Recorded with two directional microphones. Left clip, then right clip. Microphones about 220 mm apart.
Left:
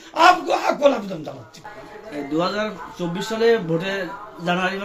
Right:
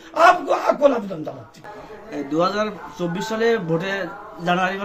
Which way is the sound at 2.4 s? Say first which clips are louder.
Right 3 dB; 15° right (ahead or behind).